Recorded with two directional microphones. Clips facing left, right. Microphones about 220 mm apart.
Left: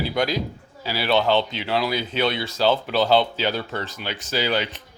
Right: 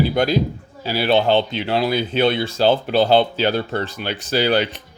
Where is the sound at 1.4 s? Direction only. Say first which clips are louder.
Right 4 dB; 50° right (ahead or behind).